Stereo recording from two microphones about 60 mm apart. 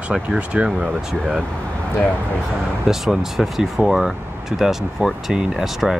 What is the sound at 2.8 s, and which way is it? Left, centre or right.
Speech, centre.